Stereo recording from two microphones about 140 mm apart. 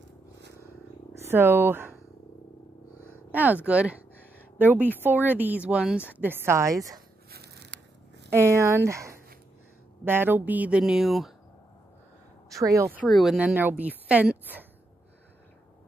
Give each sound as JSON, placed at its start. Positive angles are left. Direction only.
{"t": 1.3, "sound": "speech", "side_deg": -15}
{"t": 3.3, "sound": "speech", "side_deg": -10}
{"t": 8.3, "sound": "speech", "side_deg": -20}
{"t": 12.4, "sound": "a woman's voice", "side_deg": -25}
{"t": 13.0, "sound": "speech", "side_deg": 0}